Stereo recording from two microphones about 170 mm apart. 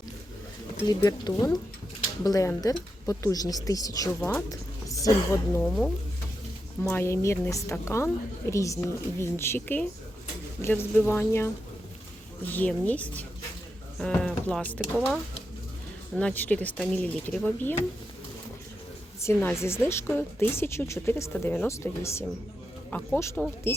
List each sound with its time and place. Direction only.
0.9 s a woman's voice: 20° left (ahead or behind)
4.2 s a woman's voice: 10° left (ahead or behind)
4.9 s a woman's voice: 20° left (ahead or behind)
5.6 s speech: 5° left (ahead or behind)
6.8 s a woman's voice: 15° left (ahead or behind)
16.1 s a woman's voice: 10° left (ahead or behind)
19.2 s a woman's voice: 15° left (ahead or behind)